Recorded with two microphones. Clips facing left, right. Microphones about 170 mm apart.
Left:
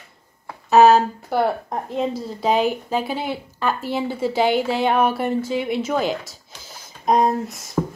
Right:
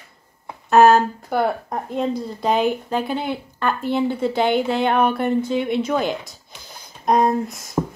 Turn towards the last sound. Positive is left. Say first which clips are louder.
# right 1 dB
turn(degrees=0)  # may be behind; listen again after turning